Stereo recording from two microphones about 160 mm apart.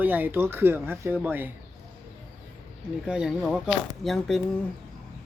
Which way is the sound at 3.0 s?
5° right (ahead or behind).